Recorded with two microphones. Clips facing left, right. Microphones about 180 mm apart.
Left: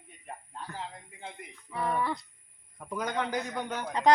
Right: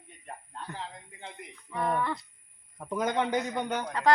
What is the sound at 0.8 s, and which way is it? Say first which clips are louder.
A woman's voice: even; 5° left (ahead or behind).